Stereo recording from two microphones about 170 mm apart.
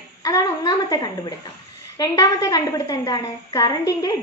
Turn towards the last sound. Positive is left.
turn(degrees=20)  # may be behind; listen again after turning